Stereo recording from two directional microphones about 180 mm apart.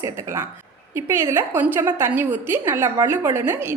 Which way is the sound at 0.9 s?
15° right (ahead or behind).